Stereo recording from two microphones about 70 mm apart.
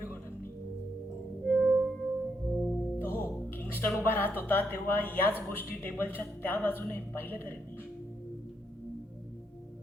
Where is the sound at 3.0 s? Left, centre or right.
Left.